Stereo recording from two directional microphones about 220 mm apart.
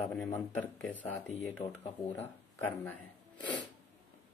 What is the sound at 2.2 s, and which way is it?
Speech, 10° left (ahead or behind).